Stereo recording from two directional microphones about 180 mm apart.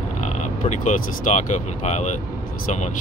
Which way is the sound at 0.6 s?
40° left (ahead or behind).